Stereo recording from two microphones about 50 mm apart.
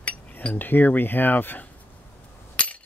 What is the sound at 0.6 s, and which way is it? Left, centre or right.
Speech, left.